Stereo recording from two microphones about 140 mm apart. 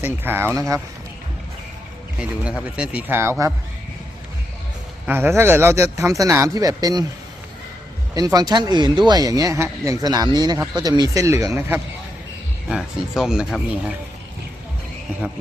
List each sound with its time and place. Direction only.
0.0 s speech: 15° right (ahead or behind)
2.1 s speech: 5° right (ahead or behind)
5.0 s speech: 15° right (ahead or behind)
8.1 s speech: 25° right (ahead or behind)
12.7 s speech: 5° right (ahead or behind)